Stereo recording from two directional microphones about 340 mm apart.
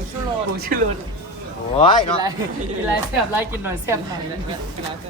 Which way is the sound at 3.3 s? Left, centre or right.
Centre.